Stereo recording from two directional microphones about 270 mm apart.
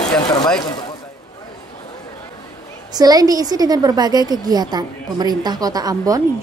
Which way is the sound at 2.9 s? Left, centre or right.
Centre.